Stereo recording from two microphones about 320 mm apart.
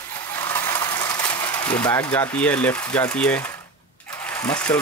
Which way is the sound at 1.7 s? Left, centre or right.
Centre.